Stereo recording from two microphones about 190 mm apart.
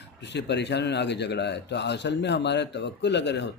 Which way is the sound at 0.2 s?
65° left (ahead or behind).